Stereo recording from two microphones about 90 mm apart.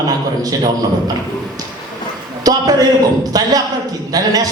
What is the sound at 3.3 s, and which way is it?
A man's voice, 45° right (ahead or behind).